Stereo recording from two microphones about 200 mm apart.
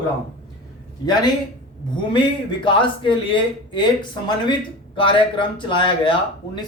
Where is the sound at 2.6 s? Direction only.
25° left (ahead or behind).